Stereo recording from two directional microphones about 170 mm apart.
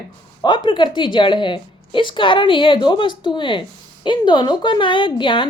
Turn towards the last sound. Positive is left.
turn(degrees=30)  # may be behind; listen again after turning